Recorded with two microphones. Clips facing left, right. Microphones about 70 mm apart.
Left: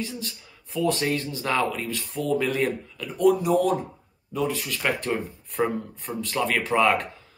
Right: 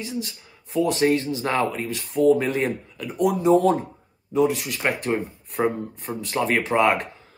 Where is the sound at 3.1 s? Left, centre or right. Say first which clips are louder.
Left 2 dB; centre.